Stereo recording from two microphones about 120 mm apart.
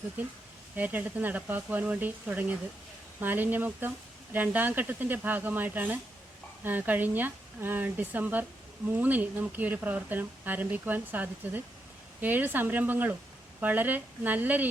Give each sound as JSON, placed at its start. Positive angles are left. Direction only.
{"t": 0.8, "sound": "speech", "side_deg": -15}